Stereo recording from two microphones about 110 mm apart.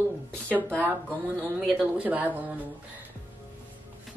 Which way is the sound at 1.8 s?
15° right (ahead or behind).